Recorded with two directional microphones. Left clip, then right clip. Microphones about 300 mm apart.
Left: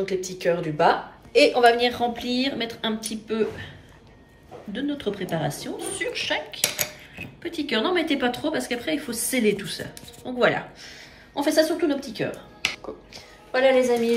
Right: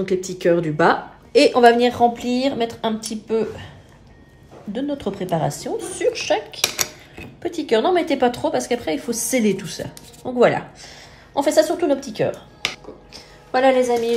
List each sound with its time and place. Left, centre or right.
0.0 s a woman's voice: right
4.7 s a woman's voice: right